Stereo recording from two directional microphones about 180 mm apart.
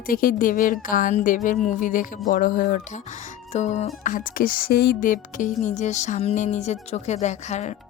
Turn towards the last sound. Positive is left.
turn(degrees=40)  # may be behind; listen again after turning